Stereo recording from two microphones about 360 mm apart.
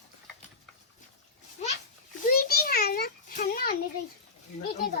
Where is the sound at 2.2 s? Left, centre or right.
Left.